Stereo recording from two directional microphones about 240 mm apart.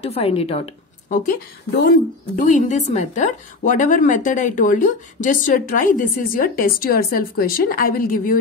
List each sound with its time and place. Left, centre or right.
0.0 s a woman's voice: left